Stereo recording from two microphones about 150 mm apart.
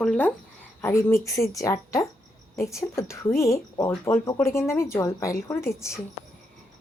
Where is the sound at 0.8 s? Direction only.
15° left (ahead or behind).